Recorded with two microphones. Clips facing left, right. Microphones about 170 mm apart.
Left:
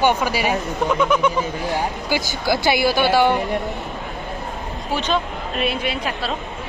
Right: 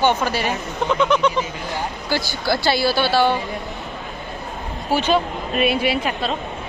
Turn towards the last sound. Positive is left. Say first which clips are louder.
# right 3 dB
turn(degrees=-5)  # may be behind; listen again after turning